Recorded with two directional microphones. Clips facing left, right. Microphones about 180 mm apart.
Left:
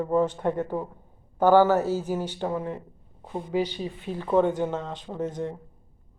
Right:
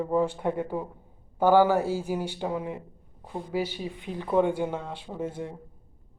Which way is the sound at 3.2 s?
20° left (ahead or behind).